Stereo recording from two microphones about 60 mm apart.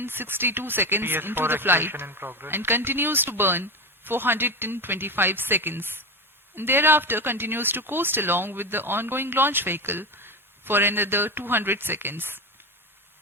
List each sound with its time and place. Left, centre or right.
0.0 s speech: right